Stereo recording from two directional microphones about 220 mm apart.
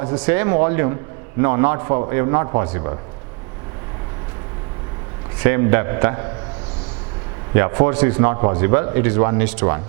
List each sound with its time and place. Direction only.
0.2 s a man's voice: 10° right (ahead or behind)
5.4 s a man's voice: 15° right (ahead or behind)
7.5 s a man's voice: 15° right (ahead or behind)